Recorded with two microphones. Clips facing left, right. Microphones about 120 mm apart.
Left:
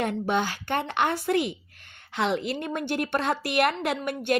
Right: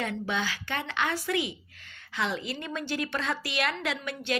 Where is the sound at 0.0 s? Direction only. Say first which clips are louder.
Left 5 dB; 55° left (ahead or behind).